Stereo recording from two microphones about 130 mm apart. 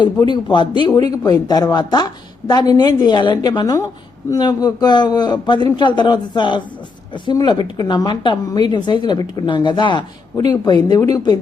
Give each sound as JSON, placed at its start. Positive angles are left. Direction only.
{"t": 0.0, "sound": "a woman's voice", "side_deg": 35}